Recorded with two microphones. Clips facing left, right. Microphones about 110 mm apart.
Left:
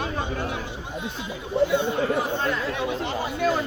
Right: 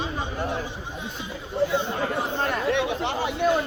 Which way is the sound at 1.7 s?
60° left (ahead or behind).